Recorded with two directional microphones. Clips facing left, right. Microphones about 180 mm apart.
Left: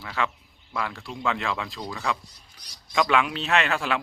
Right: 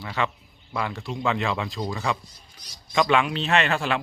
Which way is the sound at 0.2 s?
Centre (ahead or behind).